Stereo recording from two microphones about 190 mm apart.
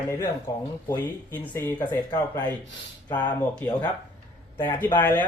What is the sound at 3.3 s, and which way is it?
Speech, 5° left (ahead or behind).